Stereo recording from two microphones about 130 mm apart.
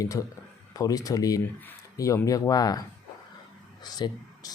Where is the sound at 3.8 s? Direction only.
30° left (ahead or behind).